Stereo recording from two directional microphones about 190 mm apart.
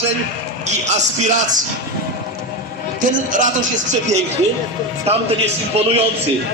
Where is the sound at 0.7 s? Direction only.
35° right (ahead or behind).